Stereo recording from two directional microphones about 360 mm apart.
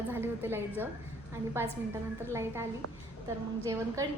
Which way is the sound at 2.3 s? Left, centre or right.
Centre.